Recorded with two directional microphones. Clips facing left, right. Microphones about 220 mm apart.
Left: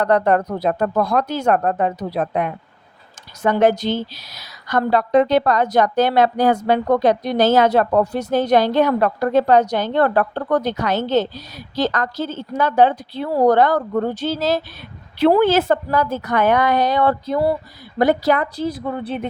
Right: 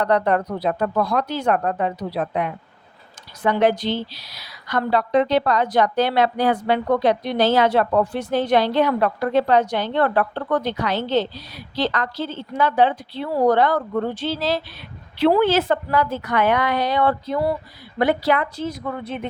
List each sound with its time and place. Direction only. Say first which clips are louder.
0.0 s a woman's voice: left 3 dB; 45° left (ahead or behind)